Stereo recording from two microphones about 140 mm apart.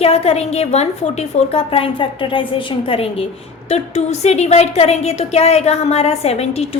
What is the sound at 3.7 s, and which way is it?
A woman's voice, 50° left (ahead or behind).